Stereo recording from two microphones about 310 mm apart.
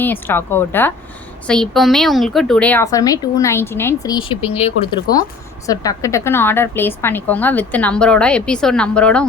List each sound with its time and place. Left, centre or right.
0.0 s a woman's voice: centre